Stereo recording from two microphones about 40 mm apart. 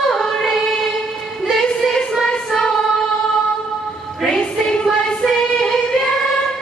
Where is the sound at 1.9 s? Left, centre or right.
Centre.